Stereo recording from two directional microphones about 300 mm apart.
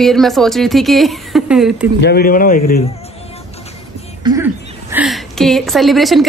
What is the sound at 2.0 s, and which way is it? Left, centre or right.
Speech, left.